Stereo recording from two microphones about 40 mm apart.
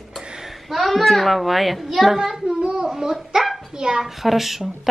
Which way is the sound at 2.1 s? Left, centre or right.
Centre.